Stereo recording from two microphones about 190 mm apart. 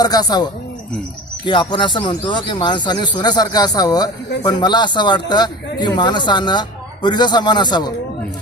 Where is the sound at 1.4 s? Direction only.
25° left (ahead or behind).